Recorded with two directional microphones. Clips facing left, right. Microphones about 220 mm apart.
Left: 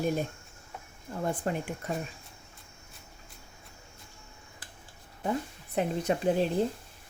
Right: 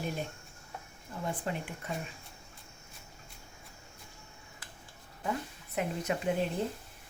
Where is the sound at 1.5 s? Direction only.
45° left (ahead or behind).